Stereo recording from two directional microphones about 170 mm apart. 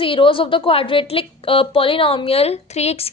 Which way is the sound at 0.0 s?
30° left (ahead or behind).